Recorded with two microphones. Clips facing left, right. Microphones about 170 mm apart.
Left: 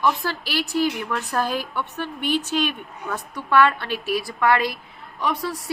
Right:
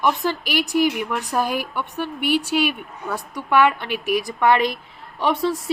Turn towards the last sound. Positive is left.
turn(degrees=-25)  # may be behind; listen again after turning